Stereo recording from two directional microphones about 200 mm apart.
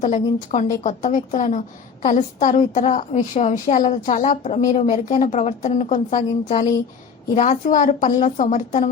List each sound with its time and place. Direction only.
0.0 s a woman's voice: 40° left (ahead or behind)